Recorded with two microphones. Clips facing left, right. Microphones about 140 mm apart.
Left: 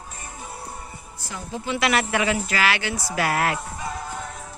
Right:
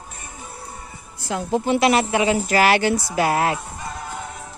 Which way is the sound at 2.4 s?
40° right (ahead or behind).